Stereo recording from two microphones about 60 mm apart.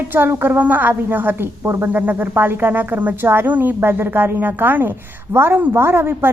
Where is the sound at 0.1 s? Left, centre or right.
Right.